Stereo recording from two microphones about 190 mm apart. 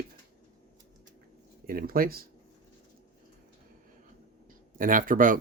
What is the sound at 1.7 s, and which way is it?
Speech, 50° right (ahead or behind).